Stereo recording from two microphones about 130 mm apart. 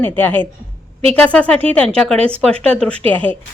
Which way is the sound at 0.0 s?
15° left (ahead or behind).